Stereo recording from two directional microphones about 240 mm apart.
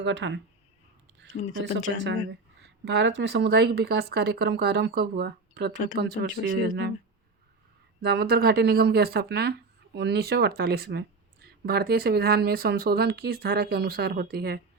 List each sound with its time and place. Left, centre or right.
0.0 s speech: right
1.4 s speech: left
2.6 s speech: right
8.0 s speech: right